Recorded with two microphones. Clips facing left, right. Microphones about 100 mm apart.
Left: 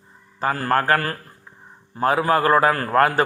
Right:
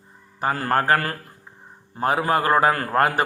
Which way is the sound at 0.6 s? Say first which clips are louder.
Left 1 dB; 25° right (ahead or behind).